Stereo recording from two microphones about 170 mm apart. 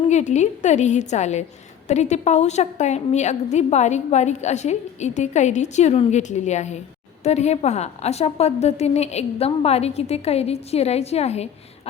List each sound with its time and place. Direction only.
0.1 s a woman's voice: 45° left (ahead or behind)